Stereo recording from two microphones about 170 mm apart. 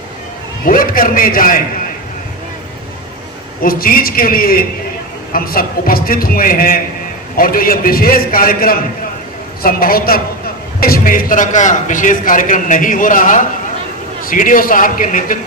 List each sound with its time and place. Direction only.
0.6 s a man's voice: 55° left (ahead or behind)
3.6 s a man's voice: 60° left (ahead or behind)